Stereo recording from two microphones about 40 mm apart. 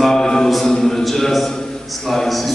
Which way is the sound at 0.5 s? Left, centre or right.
Centre.